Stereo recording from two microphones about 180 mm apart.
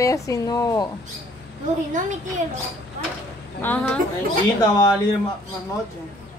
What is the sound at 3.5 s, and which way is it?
Speech, 10° left (ahead or behind).